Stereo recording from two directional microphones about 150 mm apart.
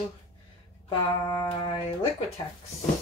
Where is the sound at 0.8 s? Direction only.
30° left (ahead or behind).